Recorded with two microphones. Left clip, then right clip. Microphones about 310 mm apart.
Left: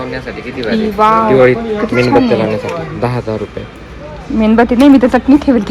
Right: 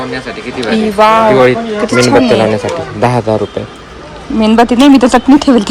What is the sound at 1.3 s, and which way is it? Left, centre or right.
Speech, right.